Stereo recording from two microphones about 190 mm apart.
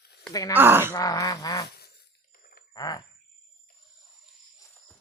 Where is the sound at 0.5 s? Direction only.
10° right (ahead or behind).